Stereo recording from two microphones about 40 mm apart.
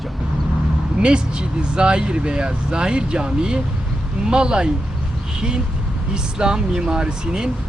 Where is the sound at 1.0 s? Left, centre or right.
Right.